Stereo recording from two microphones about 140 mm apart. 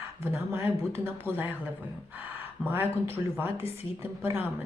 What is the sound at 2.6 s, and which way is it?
Speech, 15° right (ahead or behind).